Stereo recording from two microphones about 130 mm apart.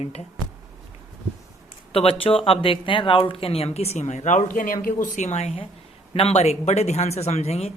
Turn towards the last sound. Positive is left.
turn(degrees=55)  # may be behind; listen again after turning